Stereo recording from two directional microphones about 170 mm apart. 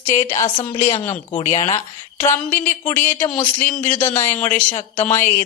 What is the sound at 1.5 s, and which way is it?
Speech, 35° left (ahead or behind).